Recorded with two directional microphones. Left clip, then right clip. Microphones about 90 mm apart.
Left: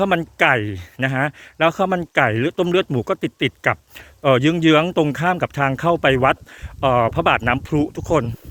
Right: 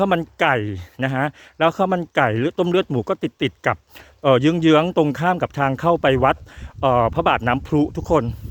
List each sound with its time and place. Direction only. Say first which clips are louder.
0.0 s speech: left 1 dB; 50° right (ahead or behind)
7.7 s speech: right 1 dB; 65° right (ahead or behind)